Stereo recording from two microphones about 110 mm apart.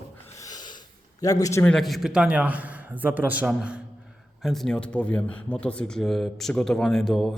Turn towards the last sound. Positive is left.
turn(degrees=5)  # may be behind; listen again after turning